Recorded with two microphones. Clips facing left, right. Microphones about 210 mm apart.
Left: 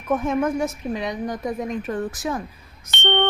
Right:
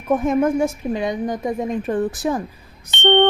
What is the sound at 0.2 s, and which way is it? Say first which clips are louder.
A woman's voice: right 4 dB; 25° right (ahead or behind).